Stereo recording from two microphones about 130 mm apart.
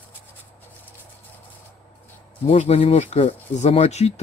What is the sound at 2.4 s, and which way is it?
Speech, 50° left (ahead or behind).